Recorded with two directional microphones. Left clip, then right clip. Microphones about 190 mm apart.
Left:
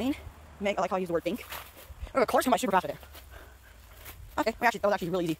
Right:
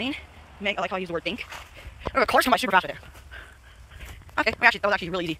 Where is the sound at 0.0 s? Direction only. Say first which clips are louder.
Right 2 dB; 15° left (ahead or behind).